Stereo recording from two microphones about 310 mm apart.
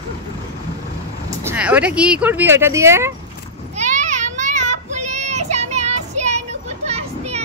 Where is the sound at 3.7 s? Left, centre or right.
Right.